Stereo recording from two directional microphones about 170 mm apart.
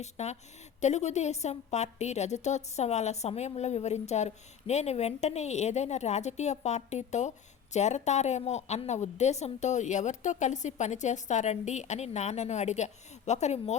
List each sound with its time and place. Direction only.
0.0 s a woman's voice: 40° left (ahead or behind)